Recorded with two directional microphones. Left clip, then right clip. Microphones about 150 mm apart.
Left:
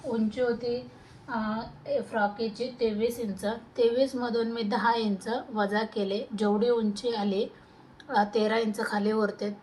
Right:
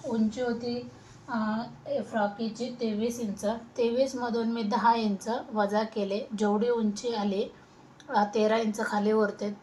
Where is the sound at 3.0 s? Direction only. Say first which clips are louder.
Left 2 dB; 25° left (ahead or behind).